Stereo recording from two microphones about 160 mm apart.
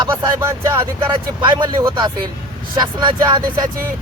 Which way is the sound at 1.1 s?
30° right (ahead or behind).